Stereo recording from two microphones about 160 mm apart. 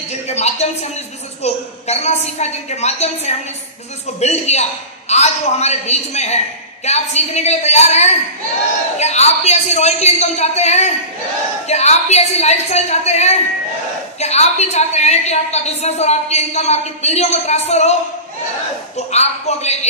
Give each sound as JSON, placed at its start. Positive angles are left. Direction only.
{"t": 0.1, "sound": "a woman's voice", "side_deg": 45}
{"t": 19.1, "sound": "a man's voice", "side_deg": 45}